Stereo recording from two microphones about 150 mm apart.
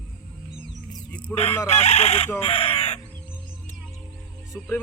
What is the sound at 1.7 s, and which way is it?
Speech, 45° left (ahead or behind).